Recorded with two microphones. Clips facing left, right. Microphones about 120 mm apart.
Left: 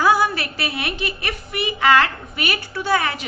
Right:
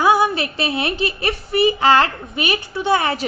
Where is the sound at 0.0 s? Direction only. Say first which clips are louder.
Right 2 dB; 20° right (ahead or behind).